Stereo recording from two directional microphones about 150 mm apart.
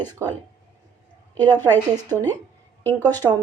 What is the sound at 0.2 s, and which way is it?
Speech, 20° right (ahead or behind).